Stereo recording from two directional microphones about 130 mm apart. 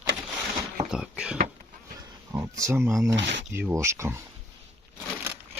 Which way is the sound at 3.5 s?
15° right (ahead or behind).